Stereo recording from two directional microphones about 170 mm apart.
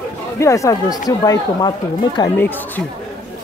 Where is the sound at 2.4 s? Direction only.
10° left (ahead or behind).